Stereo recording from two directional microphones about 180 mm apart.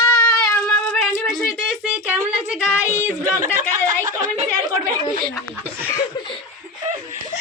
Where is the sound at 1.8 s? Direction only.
10° right (ahead or behind).